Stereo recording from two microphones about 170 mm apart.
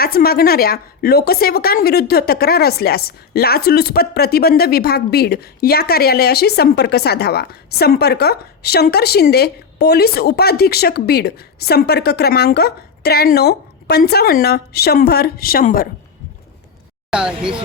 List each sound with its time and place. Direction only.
0.0 s a woman's voice: 65° left (ahead or behind)
17.1 s speech: 5° right (ahead or behind)